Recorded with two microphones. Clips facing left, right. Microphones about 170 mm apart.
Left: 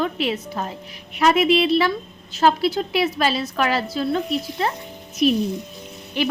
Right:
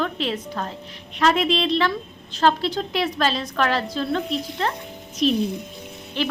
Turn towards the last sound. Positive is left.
turn(degrees=10)  # may be behind; listen again after turning